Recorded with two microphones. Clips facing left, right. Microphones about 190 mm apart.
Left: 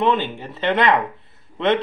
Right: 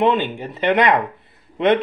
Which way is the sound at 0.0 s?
15° right (ahead or behind).